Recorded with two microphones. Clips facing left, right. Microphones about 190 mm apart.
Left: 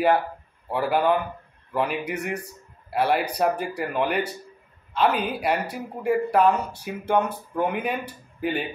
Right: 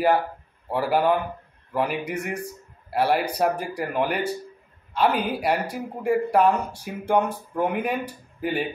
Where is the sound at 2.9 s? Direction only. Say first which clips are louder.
Right 1 dB; 10° right (ahead or behind).